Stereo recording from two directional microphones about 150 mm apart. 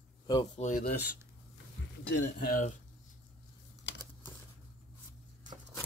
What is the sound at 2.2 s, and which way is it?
Speech, 70° left (ahead or behind).